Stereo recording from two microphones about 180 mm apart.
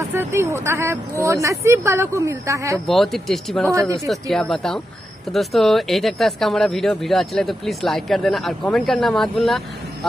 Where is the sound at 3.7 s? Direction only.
20° right (ahead or behind).